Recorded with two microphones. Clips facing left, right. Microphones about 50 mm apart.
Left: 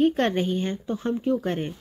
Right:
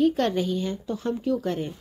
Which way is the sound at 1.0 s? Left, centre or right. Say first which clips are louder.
Left 2 dB; left.